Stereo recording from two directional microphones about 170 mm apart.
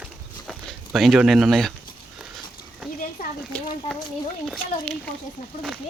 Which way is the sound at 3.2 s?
55° left (ahead or behind).